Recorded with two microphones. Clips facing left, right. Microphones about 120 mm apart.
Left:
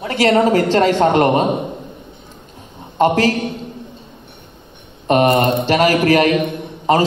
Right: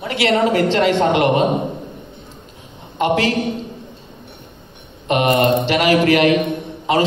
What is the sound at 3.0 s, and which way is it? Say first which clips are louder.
Speech: left 3 dB; 40° left (ahead or behind).